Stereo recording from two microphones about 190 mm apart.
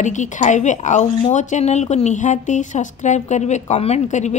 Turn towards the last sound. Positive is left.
turn(degrees=40)  # may be behind; listen again after turning